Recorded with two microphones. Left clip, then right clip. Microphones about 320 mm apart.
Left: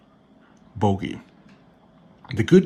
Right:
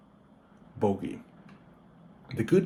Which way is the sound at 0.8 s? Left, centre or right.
Left.